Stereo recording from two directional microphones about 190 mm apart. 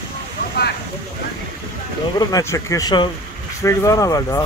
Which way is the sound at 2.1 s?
15° left (ahead or behind).